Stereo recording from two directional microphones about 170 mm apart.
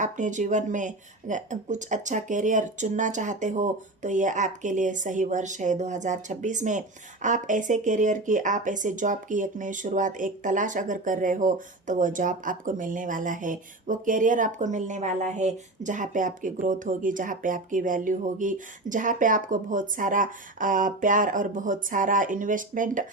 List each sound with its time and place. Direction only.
0.0 s speech: 45° right (ahead or behind)